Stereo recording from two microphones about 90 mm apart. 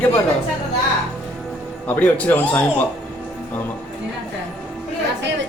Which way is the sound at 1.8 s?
20° left (ahead or behind).